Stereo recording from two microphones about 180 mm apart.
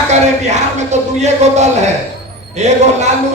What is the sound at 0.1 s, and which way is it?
A man's voice, 40° right (ahead or behind).